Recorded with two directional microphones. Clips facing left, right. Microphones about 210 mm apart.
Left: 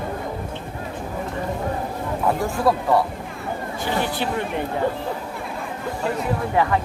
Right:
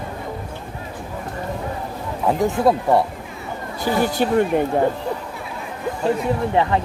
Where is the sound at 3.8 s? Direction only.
45° right (ahead or behind).